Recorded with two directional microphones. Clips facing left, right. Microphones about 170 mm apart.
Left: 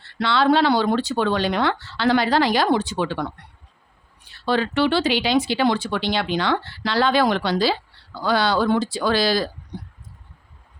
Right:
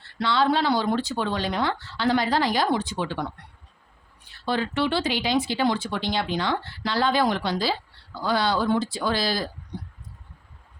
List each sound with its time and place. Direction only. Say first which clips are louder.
0.0 s speech: left 3 dB; 75° left (ahead or behind)
4.4 s speech: left 5 dB; 85° left